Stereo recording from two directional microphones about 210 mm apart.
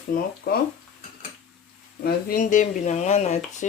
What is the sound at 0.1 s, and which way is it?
Speech, 40° left (ahead or behind).